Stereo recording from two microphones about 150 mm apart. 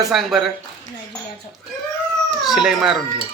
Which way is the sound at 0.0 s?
Centre (ahead or behind).